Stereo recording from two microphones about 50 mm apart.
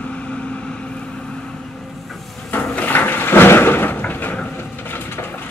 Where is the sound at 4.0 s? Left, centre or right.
Left.